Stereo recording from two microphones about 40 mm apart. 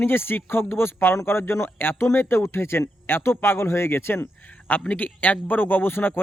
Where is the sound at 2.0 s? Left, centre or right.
Left.